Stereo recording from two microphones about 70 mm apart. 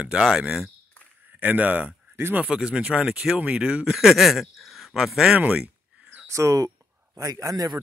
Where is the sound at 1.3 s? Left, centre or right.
Right.